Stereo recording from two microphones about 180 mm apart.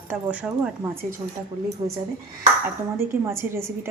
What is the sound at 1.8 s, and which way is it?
Speech, 20° right (ahead or behind).